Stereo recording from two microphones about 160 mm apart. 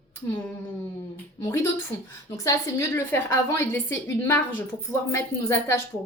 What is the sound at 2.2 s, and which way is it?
A woman's voice, 20° left (ahead or behind).